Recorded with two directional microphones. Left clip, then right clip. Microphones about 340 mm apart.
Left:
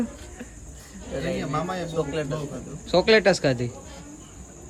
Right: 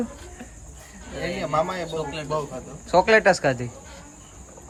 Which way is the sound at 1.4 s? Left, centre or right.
Centre.